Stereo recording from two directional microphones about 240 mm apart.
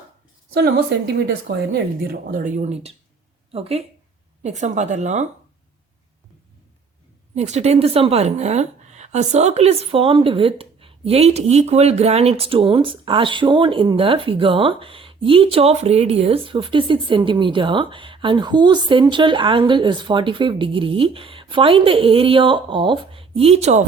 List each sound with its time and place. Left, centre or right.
0.5 s a woman's voice: right
2.2 s a woman's voice: right
7.3 s a woman's voice: right